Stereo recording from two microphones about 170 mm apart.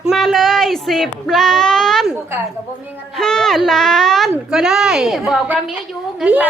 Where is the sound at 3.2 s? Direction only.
5° left (ahead or behind).